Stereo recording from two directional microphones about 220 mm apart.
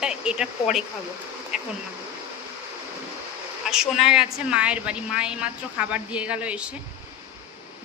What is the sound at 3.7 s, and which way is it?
A woman's voice, centre (ahead or behind).